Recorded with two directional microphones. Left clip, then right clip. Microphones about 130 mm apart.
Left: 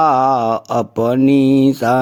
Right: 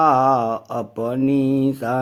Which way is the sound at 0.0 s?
40° left (ahead or behind).